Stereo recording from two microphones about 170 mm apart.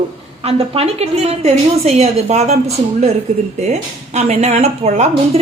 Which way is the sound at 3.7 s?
40° right (ahead or behind).